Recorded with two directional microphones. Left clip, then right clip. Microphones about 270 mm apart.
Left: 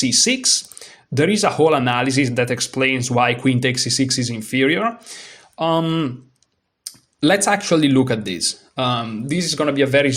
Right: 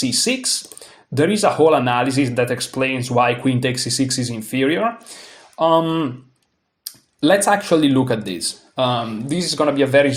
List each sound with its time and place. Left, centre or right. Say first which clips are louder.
0.0 s speech: left 3 dB; left